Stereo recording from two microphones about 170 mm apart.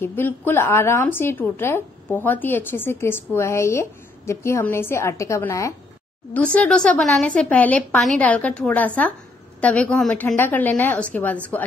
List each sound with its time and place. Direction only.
0.0 s a woman's voice: 15° left (ahead or behind)
6.3 s a woman's voice: 5° left (ahead or behind)